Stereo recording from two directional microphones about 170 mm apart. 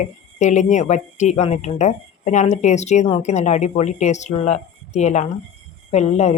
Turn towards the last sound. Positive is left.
turn(degrees=40)  # may be behind; listen again after turning